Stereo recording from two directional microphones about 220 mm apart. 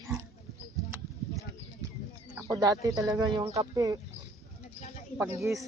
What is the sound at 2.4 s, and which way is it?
Bird, 15° right (ahead or behind).